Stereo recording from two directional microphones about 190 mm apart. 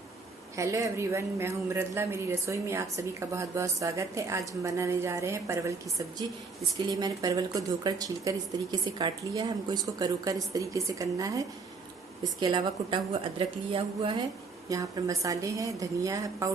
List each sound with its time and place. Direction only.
0.5 s a woman's voice: 15° right (ahead or behind)
6.8 s a woman's voice: 20° right (ahead or behind)
14.7 s a woman's voice: 20° right (ahead or behind)